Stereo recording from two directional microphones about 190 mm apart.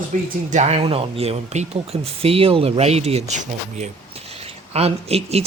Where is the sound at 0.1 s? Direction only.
40° right (ahead or behind).